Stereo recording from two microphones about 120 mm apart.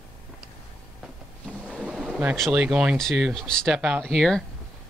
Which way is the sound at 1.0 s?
5° right (ahead or behind).